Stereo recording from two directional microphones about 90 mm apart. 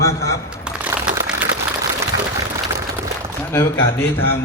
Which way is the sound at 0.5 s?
15° right (ahead or behind).